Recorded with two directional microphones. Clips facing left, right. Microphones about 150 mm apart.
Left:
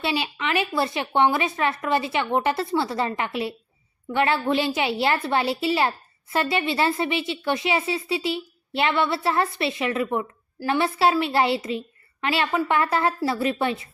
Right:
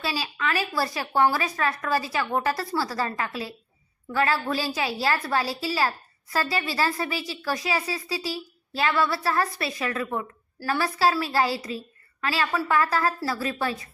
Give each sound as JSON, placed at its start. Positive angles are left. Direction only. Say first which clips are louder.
{"t": 0.0, "sound": "a woman's voice", "louder": "left 3 dB", "side_deg": 25}